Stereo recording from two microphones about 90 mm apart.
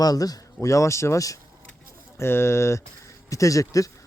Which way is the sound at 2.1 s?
25° left (ahead or behind).